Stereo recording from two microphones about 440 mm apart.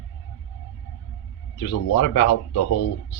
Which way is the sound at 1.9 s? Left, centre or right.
Left.